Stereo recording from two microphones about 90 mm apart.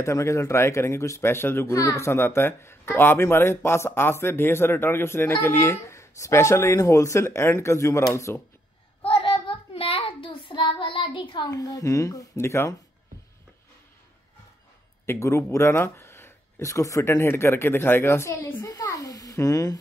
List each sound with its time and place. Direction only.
0.0 s a woman's voice: 30° left (ahead or behind)
9.0 s child singing: 85° left
11.5 s a woman's voice: 40° left (ahead or behind)
15.0 s speech: 35° left (ahead or behind)